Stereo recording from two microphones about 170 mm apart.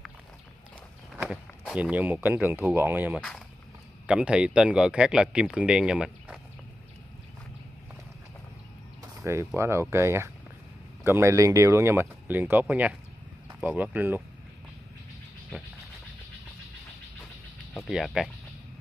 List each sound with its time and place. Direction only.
1.1 s a sound: 5° right (ahead or behind)
2.2 s speech: 10° right (ahead or behind)
3.2 s speech: 5° left (ahead or behind)
4.1 s speech: 5° right (ahead or behind)
9.2 s speech: 15° right (ahead or behind)
17.7 s speech: centre (ahead or behind)